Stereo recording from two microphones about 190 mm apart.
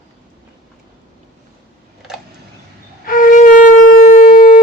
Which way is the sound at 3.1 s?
45° left (ahead or behind).